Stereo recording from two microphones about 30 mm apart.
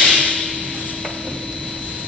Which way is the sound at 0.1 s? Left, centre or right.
Left.